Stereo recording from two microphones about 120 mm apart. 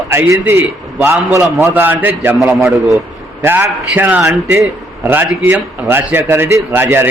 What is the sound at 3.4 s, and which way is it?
A man's voice, 20° right (ahead or behind).